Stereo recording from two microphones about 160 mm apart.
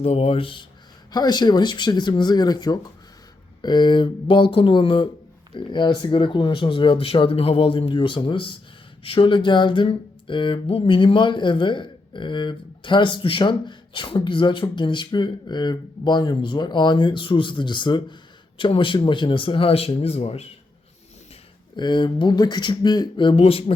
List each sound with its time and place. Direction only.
0.0 s speech: 35° left (ahead or behind)
21.8 s speech: 30° left (ahead or behind)